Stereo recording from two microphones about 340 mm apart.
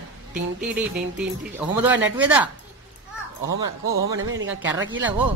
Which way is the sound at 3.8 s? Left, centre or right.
Right.